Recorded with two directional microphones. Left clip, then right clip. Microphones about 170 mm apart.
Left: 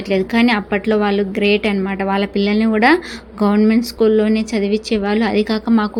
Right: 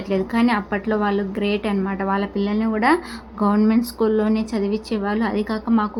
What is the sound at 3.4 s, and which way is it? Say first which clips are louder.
A woman's voice: left 4 dB; 5° left (ahead or behind).